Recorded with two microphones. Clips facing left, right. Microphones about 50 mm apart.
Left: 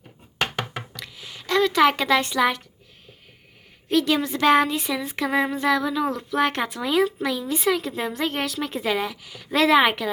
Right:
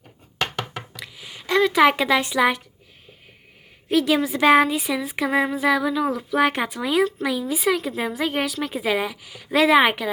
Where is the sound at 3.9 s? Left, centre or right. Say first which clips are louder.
Right 2 dB; centre.